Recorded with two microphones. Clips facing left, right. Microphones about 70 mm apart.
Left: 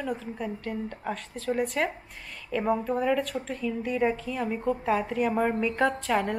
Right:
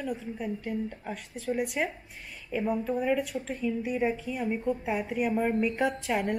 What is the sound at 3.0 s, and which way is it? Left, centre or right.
A woman's voice, centre.